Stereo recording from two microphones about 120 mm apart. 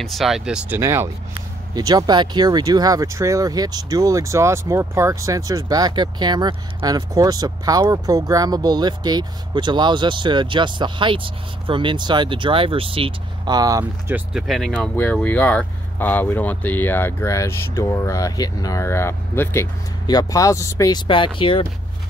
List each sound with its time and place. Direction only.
0.0 s speech: centre (ahead or behind)
0.7 s speech: 20° right (ahead or behind); by 13.1 s 50° right (ahead or behind)
13.5 s speech: 30° right (ahead or behind)
14.3 s speech: centre (ahead or behind); by 19.7 s 20° left (ahead or behind)
20.1 s speech: 30° left (ahead or behind)
21.4 s speech: 45° left (ahead or behind)